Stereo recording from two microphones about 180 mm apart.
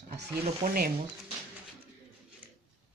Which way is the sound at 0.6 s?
40° right (ahead or behind).